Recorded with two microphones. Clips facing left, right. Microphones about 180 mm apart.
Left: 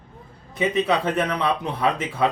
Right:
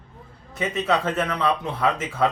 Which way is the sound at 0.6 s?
15° left (ahead or behind).